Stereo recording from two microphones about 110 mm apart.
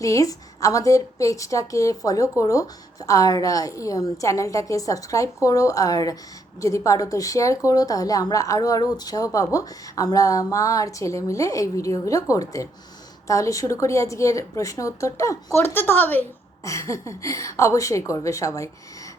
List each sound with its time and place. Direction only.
0.0 s a woman's voice: 30° left (ahead or behind)
16.6 s a woman's voice: 30° left (ahead or behind)